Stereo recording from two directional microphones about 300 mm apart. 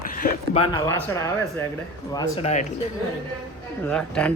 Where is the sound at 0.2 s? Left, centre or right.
Centre.